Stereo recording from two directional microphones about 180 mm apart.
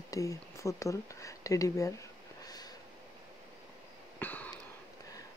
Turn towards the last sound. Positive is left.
turn(degrees=10)  # may be behind; listen again after turning